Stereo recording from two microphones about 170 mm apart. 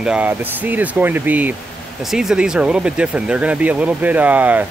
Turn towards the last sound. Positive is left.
turn(degrees=-10)  # may be behind; listen again after turning